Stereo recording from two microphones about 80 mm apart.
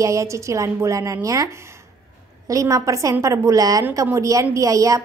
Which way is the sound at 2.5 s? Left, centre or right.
Right.